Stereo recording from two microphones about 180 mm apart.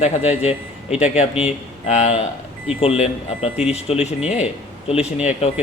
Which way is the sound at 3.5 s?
5° right (ahead or behind).